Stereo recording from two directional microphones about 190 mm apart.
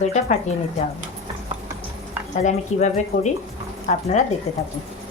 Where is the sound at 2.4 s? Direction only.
40° left (ahead or behind).